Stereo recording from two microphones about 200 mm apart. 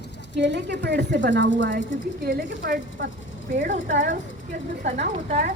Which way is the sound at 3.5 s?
35° right (ahead or behind).